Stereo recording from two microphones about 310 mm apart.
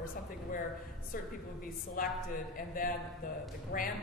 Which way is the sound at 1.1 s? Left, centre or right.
Left.